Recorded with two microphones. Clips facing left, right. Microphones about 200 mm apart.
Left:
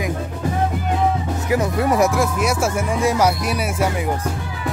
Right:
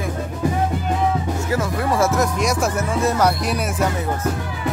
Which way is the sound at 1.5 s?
20° left (ahead or behind).